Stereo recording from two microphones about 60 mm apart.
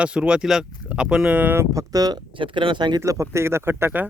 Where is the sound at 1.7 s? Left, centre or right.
Right.